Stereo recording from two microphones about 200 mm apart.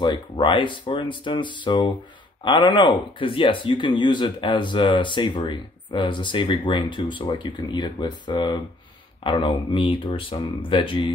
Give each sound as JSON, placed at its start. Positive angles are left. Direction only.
{"t": 0.0, "sound": "speech", "side_deg": 25}